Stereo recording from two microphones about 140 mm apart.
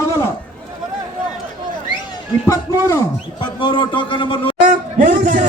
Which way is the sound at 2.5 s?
20° left (ahead or behind).